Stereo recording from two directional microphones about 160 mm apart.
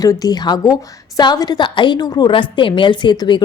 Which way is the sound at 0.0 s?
25° left (ahead or behind).